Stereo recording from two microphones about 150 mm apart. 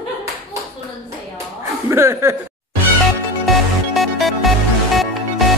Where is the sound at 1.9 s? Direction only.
20° right (ahead or behind).